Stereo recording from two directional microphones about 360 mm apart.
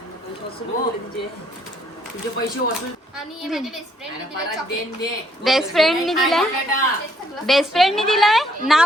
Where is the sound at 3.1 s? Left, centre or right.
Centre.